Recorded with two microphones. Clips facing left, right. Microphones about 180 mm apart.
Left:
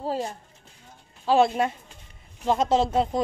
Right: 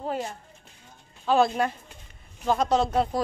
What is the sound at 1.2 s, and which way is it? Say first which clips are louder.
Speech: left 2 dB; 25° left (ahead or behind).